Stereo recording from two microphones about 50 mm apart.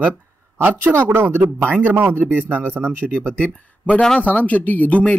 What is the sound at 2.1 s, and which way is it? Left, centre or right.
Speech, right.